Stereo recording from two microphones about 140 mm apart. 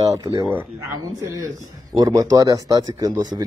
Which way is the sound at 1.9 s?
25° right (ahead or behind).